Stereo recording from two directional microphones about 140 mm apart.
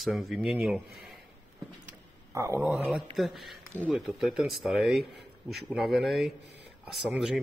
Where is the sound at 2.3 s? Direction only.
20° right (ahead or behind).